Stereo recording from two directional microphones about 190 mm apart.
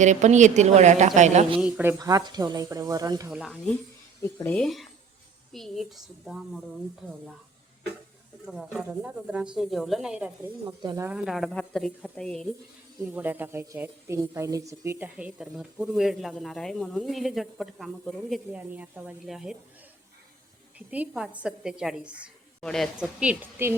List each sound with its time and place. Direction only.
0.0 s a woman's voice: 40° right (ahead or behind)
1.6 s speech: 10° right (ahead or behind)
3.2 s speech: centre (ahead or behind)
4.2 s speech: 10° left (ahead or behind)
8.4 s speech: centre (ahead or behind)
11.1 s speech: centre (ahead or behind)
13.0 s speech: 10° right (ahead or behind)
20.7 s speech: 10° right (ahead or behind)